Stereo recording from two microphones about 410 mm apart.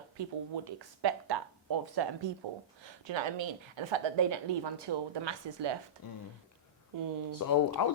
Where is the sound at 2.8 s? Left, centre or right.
Right.